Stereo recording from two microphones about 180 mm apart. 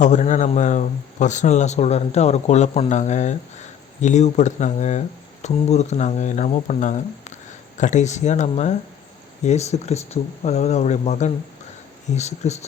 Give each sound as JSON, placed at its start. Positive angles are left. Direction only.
{"t": 0.0, "sound": "speech", "side_deg": 40}